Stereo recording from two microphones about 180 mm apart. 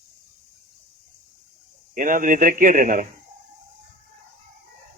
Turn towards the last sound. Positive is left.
turn(degrees=-45)  # may be behind; listen again after turning